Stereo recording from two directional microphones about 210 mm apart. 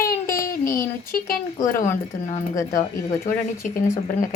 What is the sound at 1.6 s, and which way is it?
Speech, 40° left (ahead or behind).